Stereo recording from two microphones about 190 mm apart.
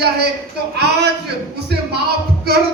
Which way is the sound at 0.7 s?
60° right (ahead or behind).